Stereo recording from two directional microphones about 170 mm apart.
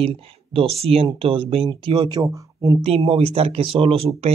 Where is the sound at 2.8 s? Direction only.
35° right (ahead or behind).